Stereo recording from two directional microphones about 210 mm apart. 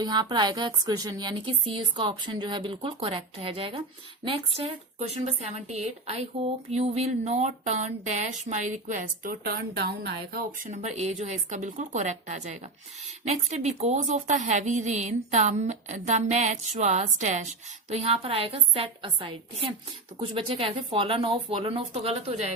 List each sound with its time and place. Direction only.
0.0 s a woman's voice: 20° right (ahead or behind)